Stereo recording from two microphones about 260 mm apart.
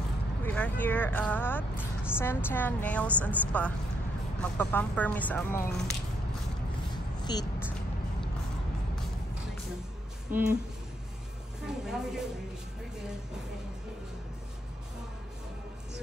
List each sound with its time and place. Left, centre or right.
0.4 s vehicle: centre
2.1 s a woman's voice: centre
7.2 s music: centre
10.3 s speech: right
11.6 s a sound: centre